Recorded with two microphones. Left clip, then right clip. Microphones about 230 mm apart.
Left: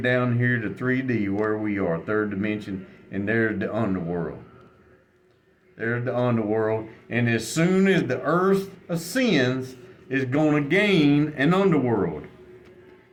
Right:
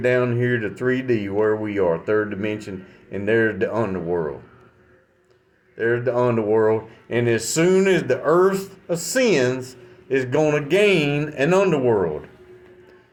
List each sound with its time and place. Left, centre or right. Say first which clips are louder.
0.0 s speech: right 4 dB; right
5.7 s speech: right 6 dB; right